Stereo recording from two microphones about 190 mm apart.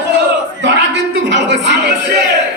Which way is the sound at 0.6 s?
65° right (ahead or behind).